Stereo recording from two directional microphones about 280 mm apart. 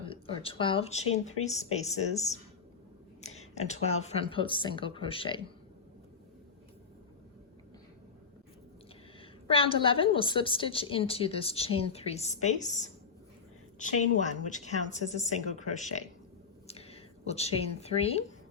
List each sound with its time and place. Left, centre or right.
0.0 s a woman's voice: centre
3.5 s a woman's voice: left
9.5 s a woman's voice: centre
14.5 s a woman's voice: left